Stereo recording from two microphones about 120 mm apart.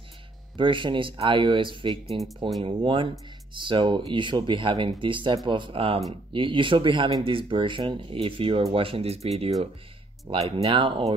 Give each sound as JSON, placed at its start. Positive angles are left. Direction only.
{"t": 0.6, "sound": "speech", "side_deg": -45}
{"t": 10.3, "sound": "speech", "side_deg": -50}